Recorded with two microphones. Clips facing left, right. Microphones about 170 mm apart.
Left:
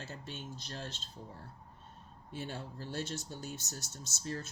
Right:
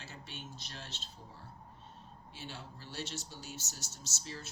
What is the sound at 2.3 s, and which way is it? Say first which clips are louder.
Speech: left 7 dB; 55° left (ahead or behind).